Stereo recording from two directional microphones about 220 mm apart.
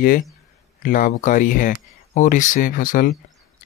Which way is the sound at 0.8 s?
35° left (ahead or behind).